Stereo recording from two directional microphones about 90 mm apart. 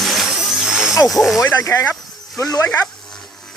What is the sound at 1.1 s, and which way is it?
Speech, centre (ahead or behind).